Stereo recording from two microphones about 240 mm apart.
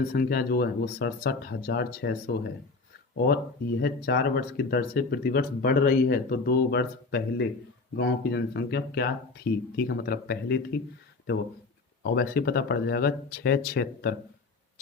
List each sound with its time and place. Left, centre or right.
0.1 s speech: left
12.0 s speech: left